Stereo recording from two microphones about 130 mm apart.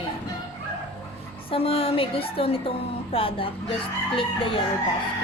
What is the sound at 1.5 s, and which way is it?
Speech, 45° left (ahead or behind).